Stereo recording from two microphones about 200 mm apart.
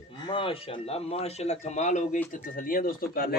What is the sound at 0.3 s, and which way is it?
Speech, 25° left (ahead or behind).